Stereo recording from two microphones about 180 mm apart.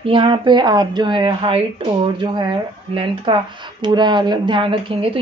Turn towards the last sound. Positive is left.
turn(degrees=-30)  # may be behind; listen again after turning